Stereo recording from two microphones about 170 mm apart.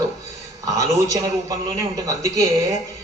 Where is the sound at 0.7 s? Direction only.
20° right (ahead or behind).